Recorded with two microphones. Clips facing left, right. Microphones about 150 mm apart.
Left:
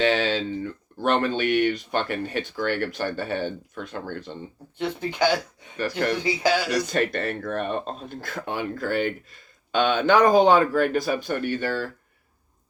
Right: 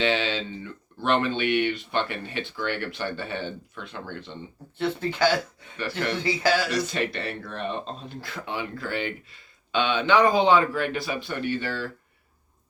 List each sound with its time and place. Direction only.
0.0 s speech: 45° left (ahead or behind)
4.8 s speech: 15° left (ahead or behind)
6.9 s speech: 45° left (ahead or behind)